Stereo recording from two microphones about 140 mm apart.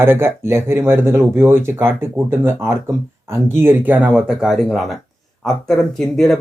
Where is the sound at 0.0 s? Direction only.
15° right (ahead or behind).